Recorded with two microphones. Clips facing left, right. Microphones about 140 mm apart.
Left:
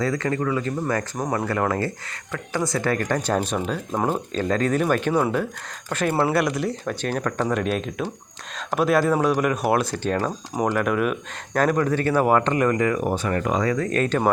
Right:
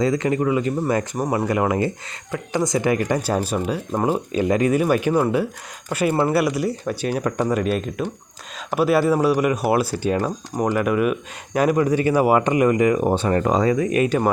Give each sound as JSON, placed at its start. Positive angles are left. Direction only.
{"t": 0.0, "sound": "speech", "side_deg": -20}
{"t": 13.7, "sound": "speech", "side_deg": -15}